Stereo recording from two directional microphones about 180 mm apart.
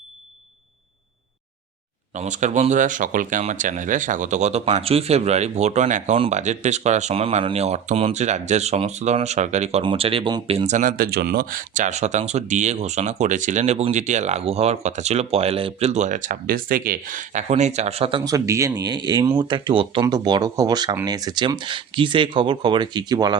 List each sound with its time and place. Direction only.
2.1 s speech: 40° right (ahead or behind)
18.3 s speech: 15° right (ahead or behind)